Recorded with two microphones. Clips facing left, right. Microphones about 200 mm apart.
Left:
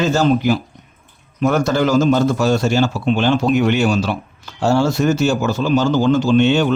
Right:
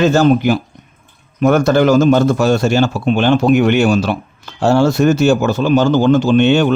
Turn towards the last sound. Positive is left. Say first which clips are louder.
# right 3 dB
turn(degrees=-55)  # may be behind; listen again after turning